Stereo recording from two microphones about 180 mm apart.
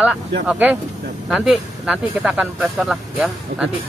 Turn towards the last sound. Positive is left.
turn(degrees=-5)  # may be behind; listen again after turning